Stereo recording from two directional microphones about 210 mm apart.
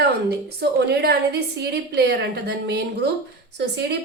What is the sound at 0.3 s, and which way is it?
A woman's voice, 50° right (ahead or behind).